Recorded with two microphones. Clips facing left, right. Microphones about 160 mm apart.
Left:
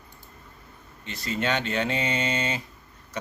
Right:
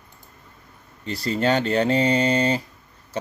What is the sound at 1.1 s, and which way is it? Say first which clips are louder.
Speech: right 6 dB; 35° right (ahead or behind).